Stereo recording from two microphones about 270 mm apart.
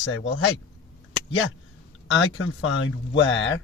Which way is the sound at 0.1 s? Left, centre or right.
Left.